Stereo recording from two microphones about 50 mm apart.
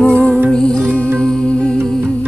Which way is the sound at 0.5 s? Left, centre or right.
Centre.